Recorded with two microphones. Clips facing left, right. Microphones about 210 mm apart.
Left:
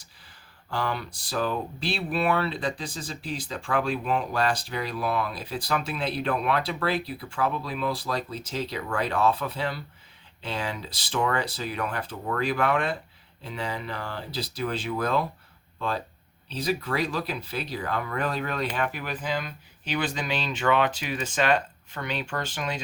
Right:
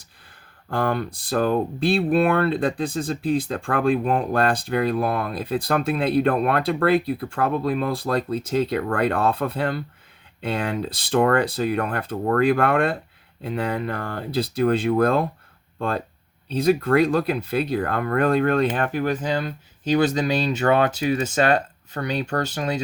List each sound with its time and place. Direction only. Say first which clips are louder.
0.7 s speech: right 7 dB; 55° right (ahead or behind)